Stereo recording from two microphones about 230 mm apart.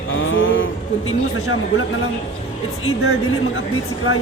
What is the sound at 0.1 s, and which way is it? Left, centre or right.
Vehicle, left.